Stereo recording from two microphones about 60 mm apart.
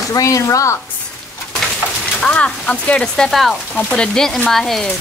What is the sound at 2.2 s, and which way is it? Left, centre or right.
Speech, left.